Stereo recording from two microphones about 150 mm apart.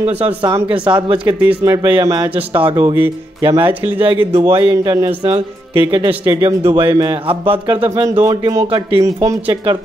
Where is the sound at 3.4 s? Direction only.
35° right (ahead or behind).